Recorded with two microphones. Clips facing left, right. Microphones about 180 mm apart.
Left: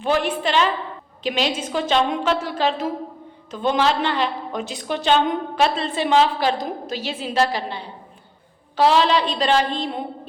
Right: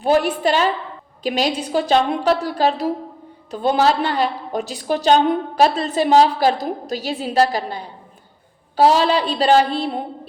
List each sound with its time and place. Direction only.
0.0 s a woman's voice: 40° right (ahead or behind)